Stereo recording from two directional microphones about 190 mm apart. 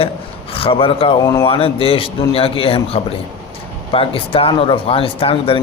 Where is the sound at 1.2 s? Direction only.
15° left (ahead or behind).